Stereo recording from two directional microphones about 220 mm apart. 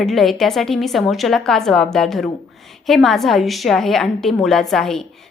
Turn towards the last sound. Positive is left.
turn(degrees=0)  # may be behind; listen again after turning